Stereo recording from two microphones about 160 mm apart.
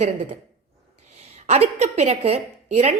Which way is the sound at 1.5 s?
45° right (ahead or behind).